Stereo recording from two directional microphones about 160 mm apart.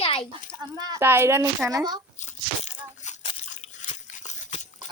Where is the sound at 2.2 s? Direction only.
50° left (ahead or behind).